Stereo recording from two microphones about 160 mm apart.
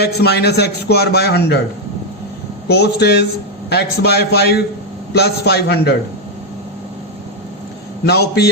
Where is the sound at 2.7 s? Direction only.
90° left.